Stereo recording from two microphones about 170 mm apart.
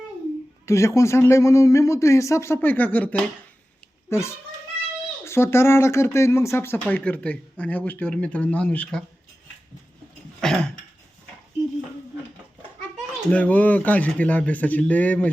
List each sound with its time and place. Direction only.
0.6 s speech: 15° left (ahead or behind)
10.4 s a sound: 5° left (ahead or behind)
13.3 s speech: 10° left (ahead or behind)